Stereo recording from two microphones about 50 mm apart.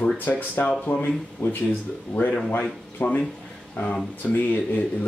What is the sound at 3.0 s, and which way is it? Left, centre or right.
Speech, left.